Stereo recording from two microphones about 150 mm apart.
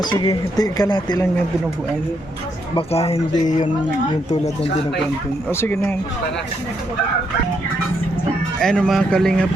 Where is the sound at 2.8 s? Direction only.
40° left (ahead or behind).